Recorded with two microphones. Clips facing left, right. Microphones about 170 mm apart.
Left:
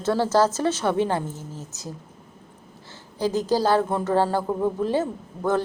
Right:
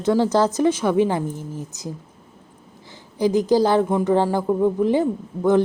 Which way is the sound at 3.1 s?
15° right (ahead or behind).